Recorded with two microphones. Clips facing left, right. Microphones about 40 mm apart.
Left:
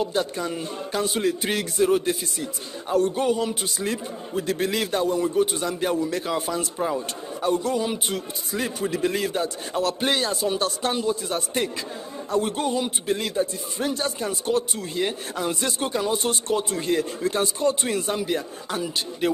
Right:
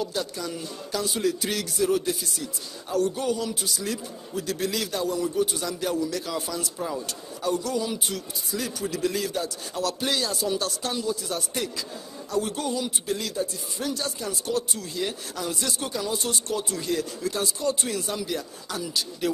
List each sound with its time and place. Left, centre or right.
0.0 s a man's voice: left